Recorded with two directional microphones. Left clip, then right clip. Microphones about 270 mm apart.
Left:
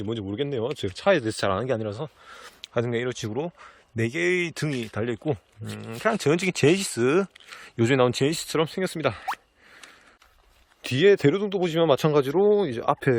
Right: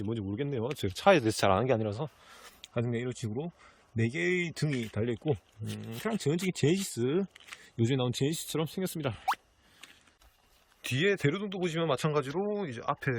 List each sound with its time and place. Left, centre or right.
0.0 s speech: centre
10.8 s a man's voice: left